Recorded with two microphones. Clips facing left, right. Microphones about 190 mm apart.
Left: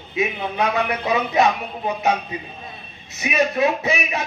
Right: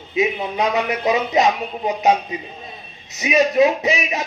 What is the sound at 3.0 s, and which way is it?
A man's voice, 20° right (ahead or behind).